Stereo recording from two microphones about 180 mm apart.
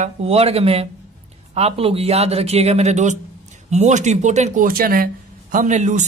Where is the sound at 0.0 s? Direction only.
35° right (ahead or behind).